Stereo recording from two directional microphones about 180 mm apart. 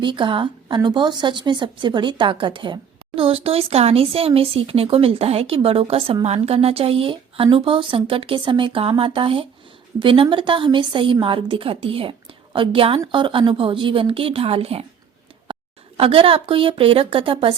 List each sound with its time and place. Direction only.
0.0 s a woman's voice: 25° right (ahead or behind)
15.5 s a sound: 25° right (ahead or behind)
16.0 s speech: 30° right (ahead or behind)